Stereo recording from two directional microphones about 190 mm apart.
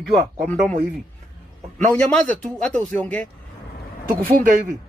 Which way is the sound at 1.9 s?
5° left (ahead or behind).